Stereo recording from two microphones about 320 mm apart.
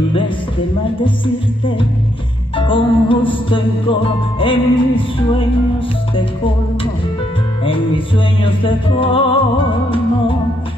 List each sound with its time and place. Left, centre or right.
2.5 s music: centre
7.6 s music: centre